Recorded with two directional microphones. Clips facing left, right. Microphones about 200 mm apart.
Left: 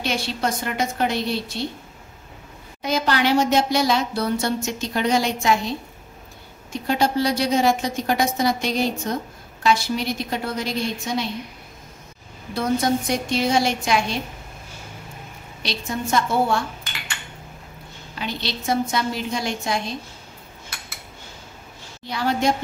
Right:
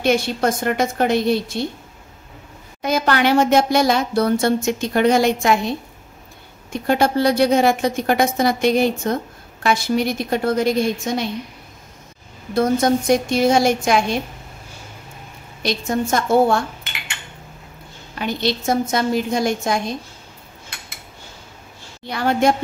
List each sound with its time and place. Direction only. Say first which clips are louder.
0.0 s a woman's voice: right 7 dB; 50° right (ahead or behind)
2.8 s speech: right 3 dB; 55° right (ahead or behind)
6.7 s a woman's voice: right 4 dB; 55° right (ahead or behind)
12.5 s a woman's voice: right 5 dB; 50° right (ahead or behind)
15.6 s a woman's voice: right 7 dB; 50° right (ahead or behind)
18.2 s a woman's voice: right 7 dB; 50° right (ahead or behind)
22.0 s speech: right 4 dB; 55° right (ahead or behind)